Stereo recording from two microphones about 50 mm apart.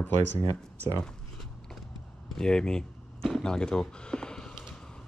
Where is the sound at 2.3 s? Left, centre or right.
Centre.